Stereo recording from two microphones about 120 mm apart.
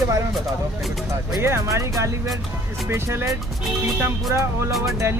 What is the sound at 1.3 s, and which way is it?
Speech, 25° right (ahead or behind).